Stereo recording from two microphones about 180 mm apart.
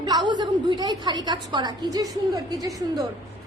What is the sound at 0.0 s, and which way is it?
A woman's voice, 25° right (ahead or behind).